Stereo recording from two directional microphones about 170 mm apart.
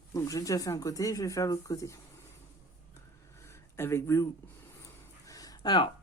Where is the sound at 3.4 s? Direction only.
15° left (ahead or behind).